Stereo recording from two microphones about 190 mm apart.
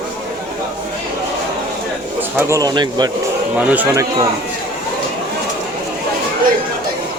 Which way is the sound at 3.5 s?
10° right (ahead or behind).